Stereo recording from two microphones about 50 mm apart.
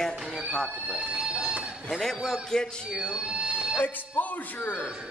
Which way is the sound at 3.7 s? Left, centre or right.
Left.